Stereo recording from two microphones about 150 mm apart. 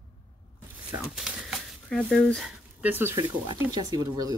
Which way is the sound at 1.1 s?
Centre (ahead or behind).